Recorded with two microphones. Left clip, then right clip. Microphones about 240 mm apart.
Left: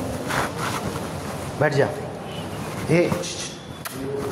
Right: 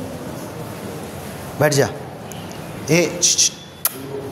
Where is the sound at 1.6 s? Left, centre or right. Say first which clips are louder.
Right 4 dB; right.